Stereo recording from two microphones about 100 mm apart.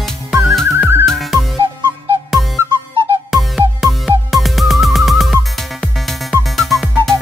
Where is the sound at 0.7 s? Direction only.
25° right (ahead or behind).